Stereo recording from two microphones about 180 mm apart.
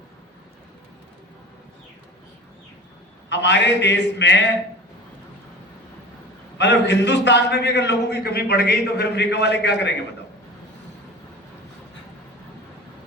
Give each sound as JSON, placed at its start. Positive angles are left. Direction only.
{"t": 3.2, "sound": "a man's voice", "side_deg": 80}
{"t": 6.6, "sound": "a man's voice", "side_deg": 75}